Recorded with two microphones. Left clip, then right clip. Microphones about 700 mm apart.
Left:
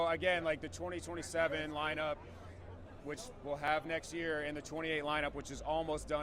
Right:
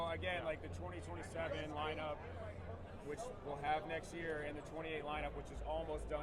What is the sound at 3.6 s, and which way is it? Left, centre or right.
Speech, left.